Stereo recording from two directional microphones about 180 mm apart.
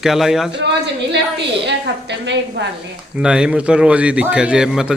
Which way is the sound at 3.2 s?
5° right (ahead or behind).